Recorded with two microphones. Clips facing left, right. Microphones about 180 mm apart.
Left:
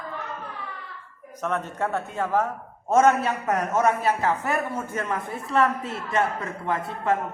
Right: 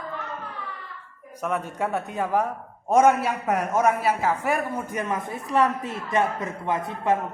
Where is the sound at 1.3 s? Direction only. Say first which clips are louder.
Even; 10° right (ahead or behind).